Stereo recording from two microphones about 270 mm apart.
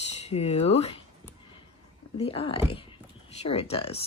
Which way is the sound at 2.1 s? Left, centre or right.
Left.